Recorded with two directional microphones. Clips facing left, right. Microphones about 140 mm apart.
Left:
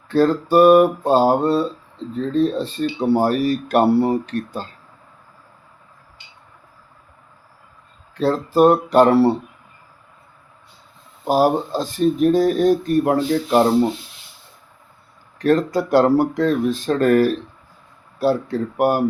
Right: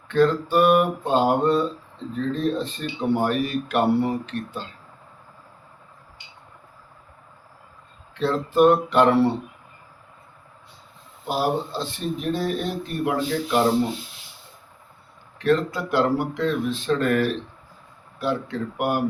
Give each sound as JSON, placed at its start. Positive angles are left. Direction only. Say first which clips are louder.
{"t": 0.1, "sound": "speech", "louder": "left 4 dB", "side_deg": 35}
{"t": 8.1, "sound": "speech", "louder": "left 4 dB", "side_deg": 40}
{"t": 11.3, "sound": "speech", "louder": "left 7 dB", "side_deg": 40}
{"t": 15.4, "sound": "speech", "louder": "left 4 dB", "side_deg": 40}